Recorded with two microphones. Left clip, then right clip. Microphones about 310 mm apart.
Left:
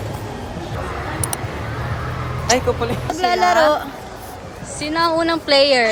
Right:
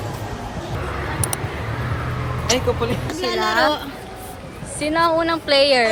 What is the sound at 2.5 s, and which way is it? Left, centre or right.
Speech, centre.